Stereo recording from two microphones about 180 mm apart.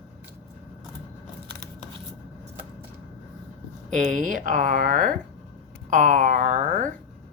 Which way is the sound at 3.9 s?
45° right (ahead or behind).